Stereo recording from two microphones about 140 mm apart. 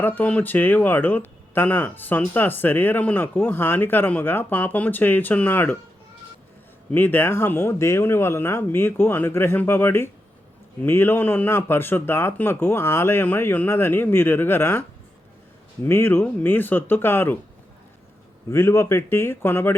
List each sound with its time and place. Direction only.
0.0 s speech: 10° left (ahead or behind)
6.9 s speech: 15° left (ahead or behind)
18.5 s speech: 20° left (ahead or behind)